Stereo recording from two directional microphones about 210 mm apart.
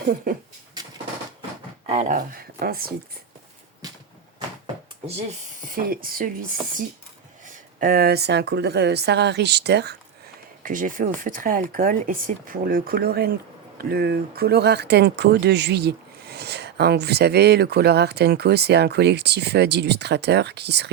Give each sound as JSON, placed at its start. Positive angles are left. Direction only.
{"t": 1.9, "sound": "speech", "side_deg": -30}
{"t": 2.1, "sound": "speech", "side_deg": -45}
{"t": 4.4, "sound": "a sound", "side_deg": -25}
{"t": 5.6, "sound": "speech", "side_deg": -45}
{"t": 7.8, "sound": "speech", "side_deg": -45}
{"t": 10.6, "sound": "speech", "side_deg": -40}